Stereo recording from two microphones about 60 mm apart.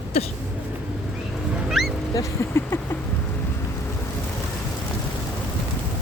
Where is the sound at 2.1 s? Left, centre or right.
Left.